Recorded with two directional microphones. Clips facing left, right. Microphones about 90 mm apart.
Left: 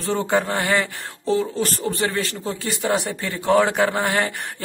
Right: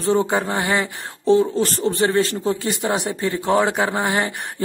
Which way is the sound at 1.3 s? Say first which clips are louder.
Right 5 dB; 30° right (ahead or behind).